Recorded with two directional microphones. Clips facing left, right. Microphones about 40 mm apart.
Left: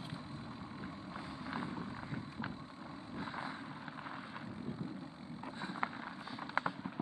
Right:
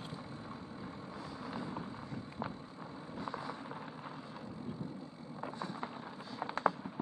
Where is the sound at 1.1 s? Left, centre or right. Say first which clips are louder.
Left 1 dB; left.